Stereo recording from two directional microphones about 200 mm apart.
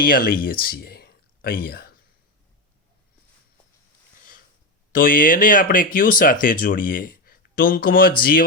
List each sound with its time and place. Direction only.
0.0 s speech: 45° left (ahead or behind)
0.4 s a sound: 45° left (ahead or behind)
4.9 s speech: 45° left (ahead or behind)